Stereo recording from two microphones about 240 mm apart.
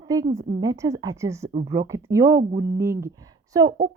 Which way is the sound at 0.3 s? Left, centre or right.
Centre.